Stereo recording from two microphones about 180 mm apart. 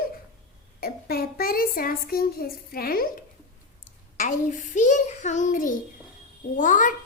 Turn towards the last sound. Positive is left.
turn(degrees=45)  # may be behind; listen again after turning